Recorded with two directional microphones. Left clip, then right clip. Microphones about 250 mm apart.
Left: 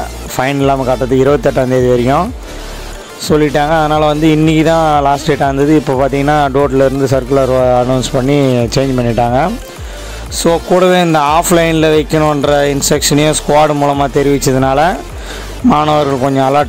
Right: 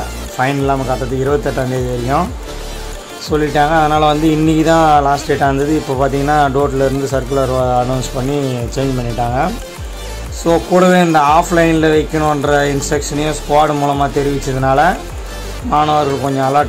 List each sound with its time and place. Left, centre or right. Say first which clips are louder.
0.4 s speech: left 3 dB; left
3.3 s speech: left 3 dB; left